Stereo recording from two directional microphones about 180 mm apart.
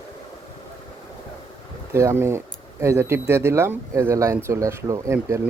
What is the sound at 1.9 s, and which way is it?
Speech, 15° right (ahead or behind).